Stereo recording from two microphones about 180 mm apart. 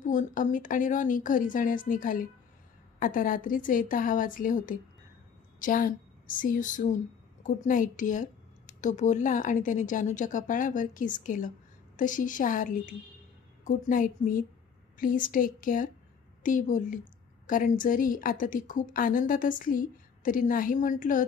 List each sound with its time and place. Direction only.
0.0 s a woman's voice: 45° left (ahead or behind)